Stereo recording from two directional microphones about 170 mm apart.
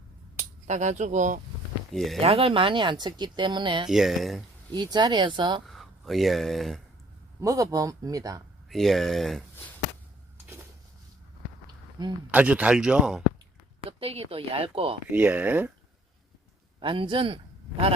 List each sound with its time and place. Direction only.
0.7 s speech: 45° right (ahead or behind)
1.9 s speech: centre (ahead or behind)
2.2 s speech: 35° right (ahead or behind)
3.8 s speech: centre (ahead or behind)
4.7 s speech: 25° right (ahead or behind)
5.6 s speech: centre (ahead or behind)
7.4 s speech: 20° right (ahead or behind)
8.7 s speech: centre (ahead or behind)
12.0 s speech: 25° right (ahead or behind)
12.3 s speech: 10° right (ahead or behind)
13.8 s speech: 35° right (ahead or behind)
15.1 s speech: 10° right (ahead or behind)
16.8 s a man's voice: 30° right (ahead or behind)